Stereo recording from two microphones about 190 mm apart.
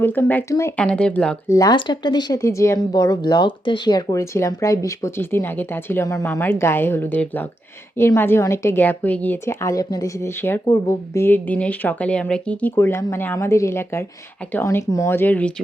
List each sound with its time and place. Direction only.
0.0 s a woman's voice: 10° left (ahead or behind)
1.5 s a woman's voice: 20° left (ahead or behind)